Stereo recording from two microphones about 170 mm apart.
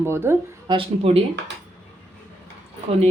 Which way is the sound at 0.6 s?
30° right (ahead or behind).